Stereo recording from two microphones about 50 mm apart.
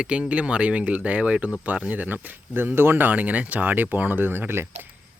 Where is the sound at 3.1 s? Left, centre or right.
Right.